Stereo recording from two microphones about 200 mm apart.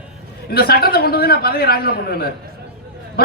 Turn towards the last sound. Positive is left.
turn(degrees=50)  # may be behind; listen again after turning